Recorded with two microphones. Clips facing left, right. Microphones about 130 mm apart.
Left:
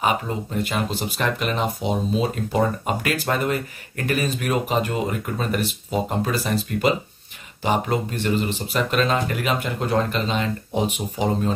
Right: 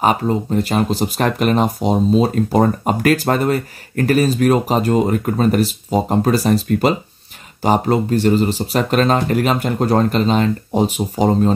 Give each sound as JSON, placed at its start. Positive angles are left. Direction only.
{"t": 0.0, "sound": "speech", "side_deg": -35}